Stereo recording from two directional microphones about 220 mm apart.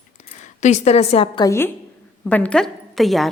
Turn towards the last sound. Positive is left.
turn(degrees=0)  # may be behind; listen again after turning